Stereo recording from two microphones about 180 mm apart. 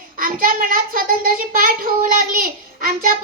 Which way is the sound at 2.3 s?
50° right (ahead or behind).